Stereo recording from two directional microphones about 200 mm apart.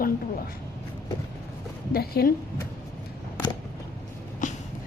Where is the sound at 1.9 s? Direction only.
50° left (ahead or behind).